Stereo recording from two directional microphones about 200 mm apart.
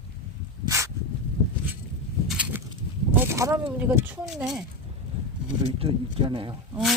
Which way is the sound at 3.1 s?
10° right (ahead or behind).